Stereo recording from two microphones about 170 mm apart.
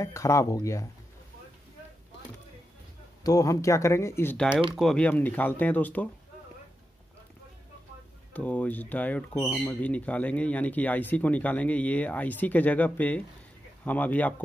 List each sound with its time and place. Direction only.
0.0 s speech: 15° left (ahead or behind)
3.3 s speech: 20° left (ahead or behind)
8.3 s speech: 10° left (ahead or behind)